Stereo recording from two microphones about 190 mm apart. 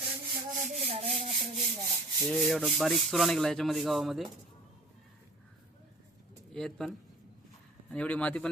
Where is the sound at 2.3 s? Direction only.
Centre (ahead or behind).